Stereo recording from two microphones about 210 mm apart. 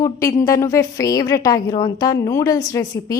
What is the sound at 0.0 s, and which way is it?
A woman's voice, 15° left (ahead or behind).